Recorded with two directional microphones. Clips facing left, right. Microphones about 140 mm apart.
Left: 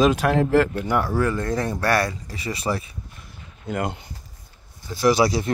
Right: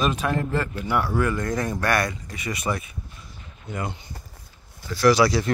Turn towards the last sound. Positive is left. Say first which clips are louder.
# right 1 dB
turn(degrees=20)  # may be behind; listen again after turning